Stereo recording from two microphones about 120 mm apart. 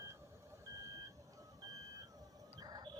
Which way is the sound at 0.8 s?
30° right (ahead or behind).